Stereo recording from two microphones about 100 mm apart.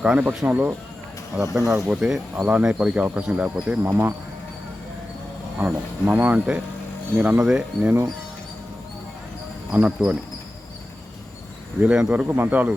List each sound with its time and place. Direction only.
0.0 s speech: 10° right (ahead or behind)
1.5 s speech: 30° right (ahead or behind)
1.9 s speech: 5° right (ahead or behind)
5.5 s speech: 15° right (ahead or behind)
9.7 s speech: 10° right (ahead or behind)
11.8 s speech: 10° right (ahead or behind)